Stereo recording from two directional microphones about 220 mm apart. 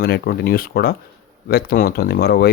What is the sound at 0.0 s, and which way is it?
Speech, 45° left (ahead or behind).